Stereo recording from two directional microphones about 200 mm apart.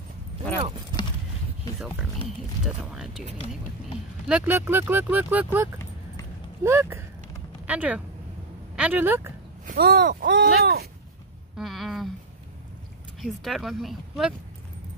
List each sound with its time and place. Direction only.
2.6 s speech: centre (ahead or behind)
4.3 s speech: 5° right (ahead or behind)
9.7 s speech: 50° right (ahead or behind)
11.5 s a sound: centre (ahead or behind)
13.2 s speech: centre (ahead or behind)